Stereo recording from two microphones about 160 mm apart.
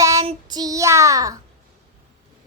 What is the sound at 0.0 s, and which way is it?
Child singing, 20° right (ahead or behind).